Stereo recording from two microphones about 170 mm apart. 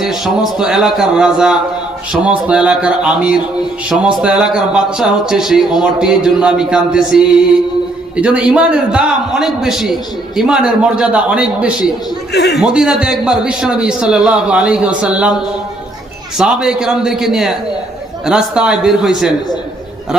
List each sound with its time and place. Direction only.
0.6 s a man's voice: 5° right (ahead or behind)
12.3 s a man's voice: 75° left (ahead or behind)
12.5 s a man's voice: 5° right (ahead or behind)
16.4 s a man's voice: 5° right (ahead or behind)